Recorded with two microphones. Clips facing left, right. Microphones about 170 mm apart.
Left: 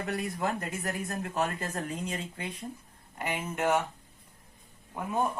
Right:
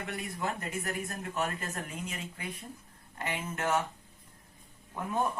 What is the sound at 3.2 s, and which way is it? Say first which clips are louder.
Speech: left 3 dB; 15° left (ahead or behind).